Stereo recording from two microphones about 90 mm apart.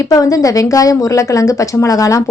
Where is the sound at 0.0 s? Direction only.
40° left (ahead or behind).